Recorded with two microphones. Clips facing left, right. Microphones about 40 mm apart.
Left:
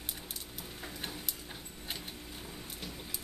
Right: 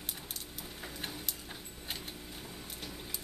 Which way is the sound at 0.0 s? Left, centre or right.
Centre.